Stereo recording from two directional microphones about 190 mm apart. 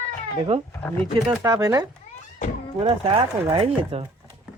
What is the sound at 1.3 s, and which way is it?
Speech, 15° right (ahead or behind).